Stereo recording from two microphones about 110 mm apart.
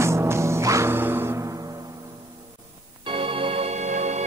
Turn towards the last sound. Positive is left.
turn(degrees=-80)